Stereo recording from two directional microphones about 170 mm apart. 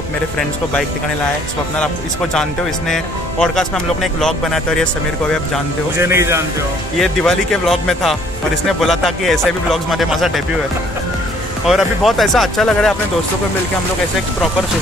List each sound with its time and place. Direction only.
2.9 s speech: 5° left (ahead or behind)
5.9 s speech: 15° right (ahead or behind)
7.0 s speech: centre (ahead or behind)
11.6 s speech: centre (ahead or behind)